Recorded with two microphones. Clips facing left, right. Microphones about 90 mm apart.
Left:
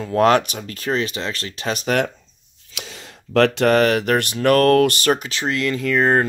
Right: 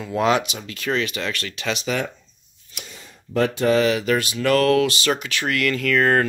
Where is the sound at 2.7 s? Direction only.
90° left; by 5.3 s 45° left (ahead or behind).